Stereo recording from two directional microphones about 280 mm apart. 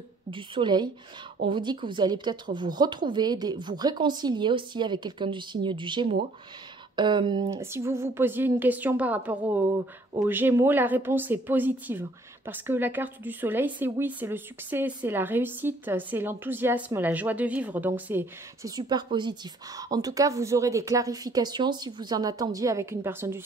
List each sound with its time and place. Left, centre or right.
0.3 s speech: centre